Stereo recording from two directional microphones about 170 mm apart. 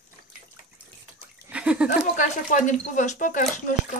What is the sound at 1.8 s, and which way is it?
Speech, 50° left (ahead or behind).